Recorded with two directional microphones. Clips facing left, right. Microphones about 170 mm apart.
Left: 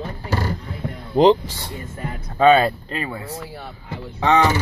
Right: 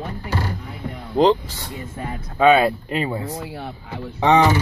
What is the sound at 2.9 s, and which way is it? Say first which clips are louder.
Speech: right 4 dB; 20° right (ahead or behind).